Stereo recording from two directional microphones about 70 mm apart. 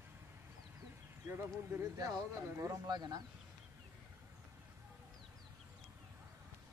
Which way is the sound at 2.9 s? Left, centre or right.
Right.